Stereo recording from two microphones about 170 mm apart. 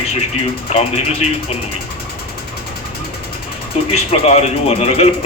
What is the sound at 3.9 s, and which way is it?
Speech, 35° left (ahead or behind).